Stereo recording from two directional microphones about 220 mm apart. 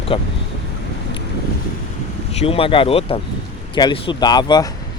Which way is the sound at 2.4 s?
25° left (ahead or behind).